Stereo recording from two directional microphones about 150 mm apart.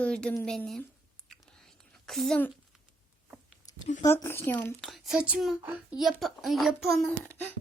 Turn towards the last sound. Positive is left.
turn(degrees=10)  # may be behind; listen again after turning